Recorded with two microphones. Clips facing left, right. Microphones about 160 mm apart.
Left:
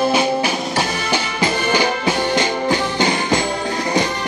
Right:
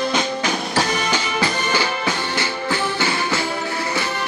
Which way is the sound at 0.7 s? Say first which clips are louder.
Even; 15° left (ahead or behind).